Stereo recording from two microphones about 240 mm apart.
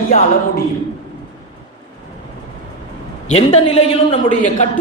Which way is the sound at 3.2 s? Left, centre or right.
Left.